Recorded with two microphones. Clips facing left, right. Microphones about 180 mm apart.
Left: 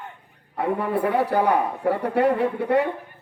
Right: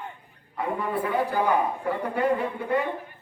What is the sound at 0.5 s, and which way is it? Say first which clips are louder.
A man's voice: left 4 dB; 70° left (ahead or behind).